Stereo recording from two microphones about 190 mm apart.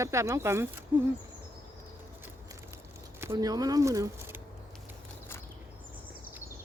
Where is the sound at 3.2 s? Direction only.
15° right (ahead or behind).